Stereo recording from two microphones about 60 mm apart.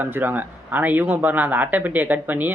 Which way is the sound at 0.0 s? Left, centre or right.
Right.